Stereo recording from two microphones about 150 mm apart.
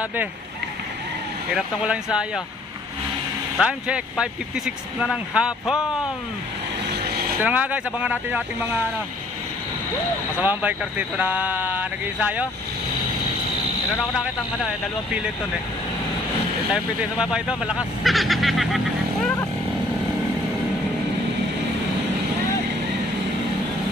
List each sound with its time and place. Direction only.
1.5 s speech: 5° right (ahead or behind)
3.5 s speech: 5° right (ahead or behind)
6.9 s vehicle: 90° right
7.4 s speech: 10° right (ahead or behind)
10.4 s speech: 10° right (ahead or behind)
14.1 s speech: centre (ahead or behind)
16.7 s speech: 5° right (ahead or behind)